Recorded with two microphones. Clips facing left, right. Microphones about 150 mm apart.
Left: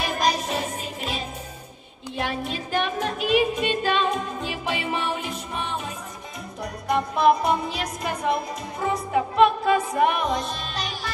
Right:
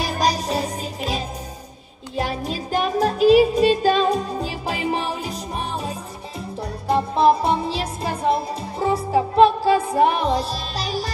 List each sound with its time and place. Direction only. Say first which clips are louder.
0.0 s music: right 2 dB; 35° right (ahead or behind)